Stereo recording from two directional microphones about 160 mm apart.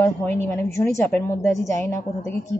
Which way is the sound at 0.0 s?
15° left (ahead or behind).